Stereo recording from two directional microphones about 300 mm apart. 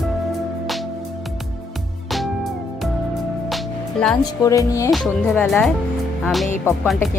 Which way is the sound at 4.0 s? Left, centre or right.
Centre.